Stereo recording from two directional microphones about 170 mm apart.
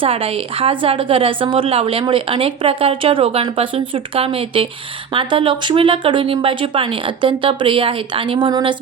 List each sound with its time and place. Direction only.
0.0 s a woman's voice: 35° right (ahead or behind)